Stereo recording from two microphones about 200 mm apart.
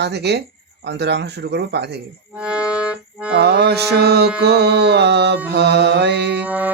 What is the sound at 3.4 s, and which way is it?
Speech, 55° right (ahead or behind).